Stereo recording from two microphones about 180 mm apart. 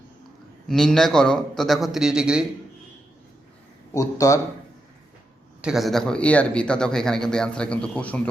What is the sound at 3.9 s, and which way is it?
Speech, 20° left (ahead or behind).